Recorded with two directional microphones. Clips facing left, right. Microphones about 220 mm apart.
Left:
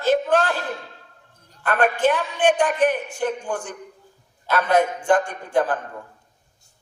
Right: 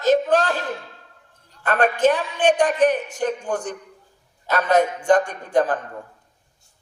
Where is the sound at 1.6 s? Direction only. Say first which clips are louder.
Right 1 dB; 40° right (ahead or behind).